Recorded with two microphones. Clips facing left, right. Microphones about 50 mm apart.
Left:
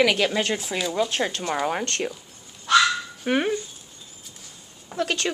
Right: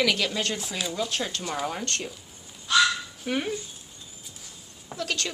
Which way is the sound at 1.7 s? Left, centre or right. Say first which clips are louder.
Left 5 dB; left.